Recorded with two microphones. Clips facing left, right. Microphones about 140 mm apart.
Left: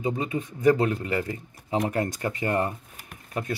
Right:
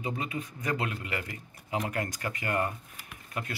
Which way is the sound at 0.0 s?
25° left (ahead or behind).